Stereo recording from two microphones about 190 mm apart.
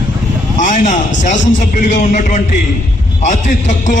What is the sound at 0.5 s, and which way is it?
A man's voice, 40° left (ahead or behind).